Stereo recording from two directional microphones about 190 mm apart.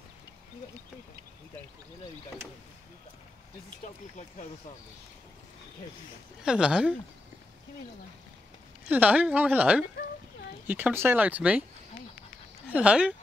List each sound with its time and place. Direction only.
6.4 s speech: 5° right (ahead or behind)
8.8 s speech: 10° right (ahead or behind)
12.6 s speech: 5° right (ahead or behind)